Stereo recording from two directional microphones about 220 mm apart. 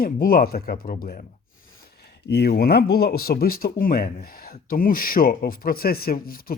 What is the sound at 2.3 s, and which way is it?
Speech, 45° left (ahead or behind).